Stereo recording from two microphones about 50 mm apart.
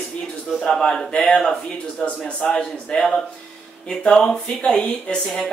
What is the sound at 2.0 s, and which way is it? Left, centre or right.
Speech, left.